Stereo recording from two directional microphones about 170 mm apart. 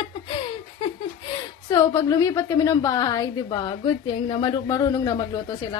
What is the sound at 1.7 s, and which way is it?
A woman's voice, 20° left (ahead or behind).